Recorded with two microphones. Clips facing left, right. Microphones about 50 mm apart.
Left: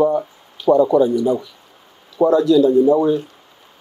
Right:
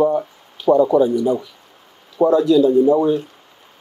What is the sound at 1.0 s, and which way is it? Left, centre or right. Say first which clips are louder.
Speech: even; centre.